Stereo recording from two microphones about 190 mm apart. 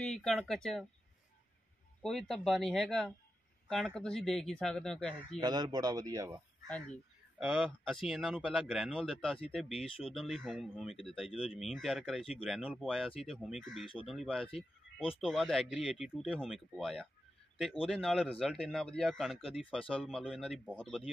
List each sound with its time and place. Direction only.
0.0 s speech: centre (ahead or behind)
2.0 s speech: centre (ahead or behind)
5.4 s a man's voice: 20° right (ahead or behind)
7.3 s speech: 5° right (ahead or behind)
15.0 s speech: 30° left (ahead or behind)
15.2 s speech: centre (ahead or behind)